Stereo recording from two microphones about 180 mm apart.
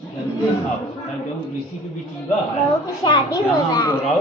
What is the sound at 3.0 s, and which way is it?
Speech, 25° left (ahead or behind).